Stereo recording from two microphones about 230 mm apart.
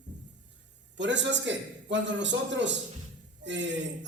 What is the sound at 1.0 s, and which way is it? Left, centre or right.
A woman's voice, right.